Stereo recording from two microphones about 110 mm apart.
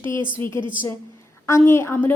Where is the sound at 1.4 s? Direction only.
25° left (ahead or behind).